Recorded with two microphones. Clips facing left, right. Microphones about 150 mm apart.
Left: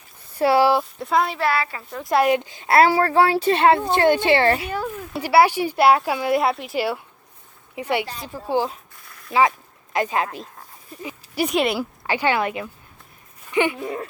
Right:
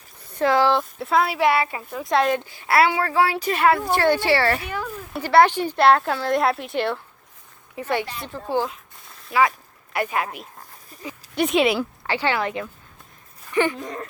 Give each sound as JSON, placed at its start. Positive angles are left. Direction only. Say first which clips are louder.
{"t": 0.4, "sound": "speech", "louder": "left 2 dB", "side_deg": 10}
{"t": 0.9, "sound": "speech", "louder": "even", "side_deg": 0}
{"t": 1.4, "sound": "a woman's voice", "louder": "right 3 dB", "side_deg": -20}
{"t": 1.9, "sound": "speech", "louder": "left 3 dB", "side_deg": 0}
{"t": 2.3, "sound": "a child's voice", "louder": "left 3 dB", "side_deg": 20}
{"t": 2.8, "sound": "a child's voice", "louder": "left 4 dB", "side_deg": 35}
{"t": 5.1, "sound": "speech", "louder": "even", "side_deg": 5}
{"t": 9.3, "sound": "a child's voice", "louder": "left 1 dB", "side_deg": 25}
{"t": 11.3, "sound": "speech", "louder": "right 2 dB", "side_deg": 0}
{"t": 12.0, "sound": "speech", "louder": "left 3 dB", "side_deg": 15}